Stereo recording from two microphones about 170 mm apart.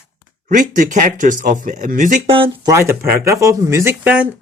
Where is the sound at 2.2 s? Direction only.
30° right (ahead or behind).